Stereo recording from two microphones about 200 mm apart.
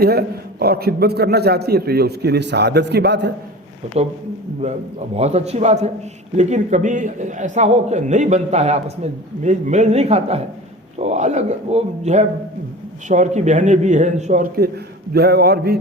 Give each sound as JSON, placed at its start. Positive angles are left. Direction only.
{"t": 0.0, "sound": "a man's voice", "side_deg": -50}
{"t": 5.1, "sound": "a man's voice", "side_deg": -30}